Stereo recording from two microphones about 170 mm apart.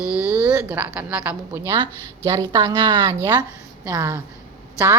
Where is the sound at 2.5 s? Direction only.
25° right (ahead or behind).